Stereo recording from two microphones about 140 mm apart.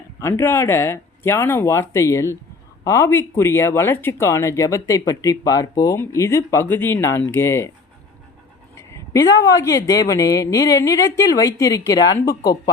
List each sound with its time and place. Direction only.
0.2 s speech: 20° left (ahead or behind)
8.7 s speech: 20° left (ahead or behind)